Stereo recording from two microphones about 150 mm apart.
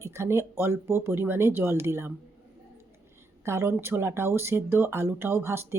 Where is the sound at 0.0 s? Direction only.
20° right (ahead or behind).